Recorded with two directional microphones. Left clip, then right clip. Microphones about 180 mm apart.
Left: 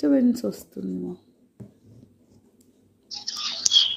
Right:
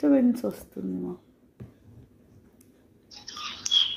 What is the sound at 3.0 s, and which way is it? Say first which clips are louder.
Whispering: left 7 dB; 60° left (ahead or behind).